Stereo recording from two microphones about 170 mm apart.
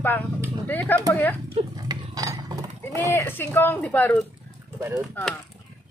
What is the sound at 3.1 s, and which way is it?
A man's voice, 15° left (ahead or behind).